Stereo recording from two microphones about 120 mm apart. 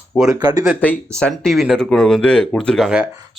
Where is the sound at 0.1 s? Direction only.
5° right (ahead or behind).